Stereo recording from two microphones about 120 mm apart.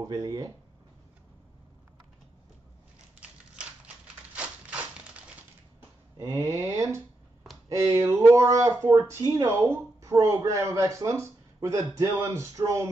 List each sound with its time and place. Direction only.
0.0 s speech: 30° right (ahead or behind)
3.2 s typewriter: 10° right (ahead or behind)
6.2 s speech: 25° right (ahead or behind)